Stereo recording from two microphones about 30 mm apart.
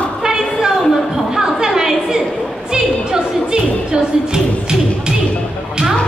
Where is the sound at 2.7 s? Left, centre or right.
Right.